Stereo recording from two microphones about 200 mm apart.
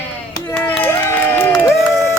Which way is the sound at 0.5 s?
10° left (ahead or behind).